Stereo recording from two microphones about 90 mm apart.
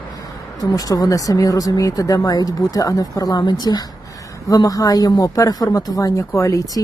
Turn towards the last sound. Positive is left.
turn(degrees=40)  # may be behind; listen again after turning